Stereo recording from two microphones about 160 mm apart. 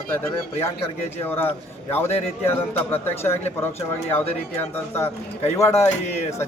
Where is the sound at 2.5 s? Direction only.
15° left (ahead or behind).